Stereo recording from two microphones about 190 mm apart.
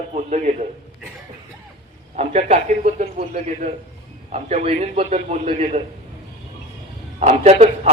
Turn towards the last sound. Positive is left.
turn(degrees=-30)  # may be behind; listen again after turning